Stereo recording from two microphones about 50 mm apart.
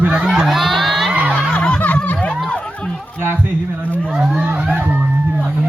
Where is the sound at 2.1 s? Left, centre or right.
Left.